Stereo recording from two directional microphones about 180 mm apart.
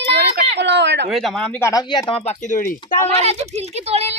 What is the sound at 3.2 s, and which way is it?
Speech, 35° right (ahead or behind).